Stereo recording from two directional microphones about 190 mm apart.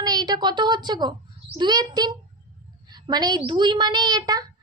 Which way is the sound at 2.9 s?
20° right (ahead or behind).